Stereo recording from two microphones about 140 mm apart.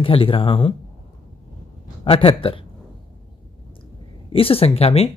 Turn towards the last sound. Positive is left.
turn(degrees=45)  # may be behind; listen again after turning